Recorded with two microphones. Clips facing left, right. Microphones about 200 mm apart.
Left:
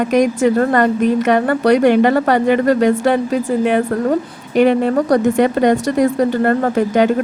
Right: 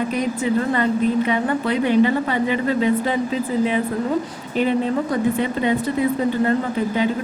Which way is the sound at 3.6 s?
65° left (ahead or behind).